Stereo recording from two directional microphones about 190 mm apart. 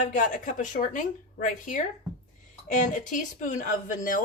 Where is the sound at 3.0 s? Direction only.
45° left (ahead or behind).